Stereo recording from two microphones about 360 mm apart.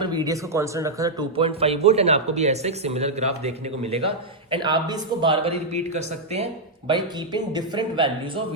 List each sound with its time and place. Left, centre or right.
0.0 s speech: centre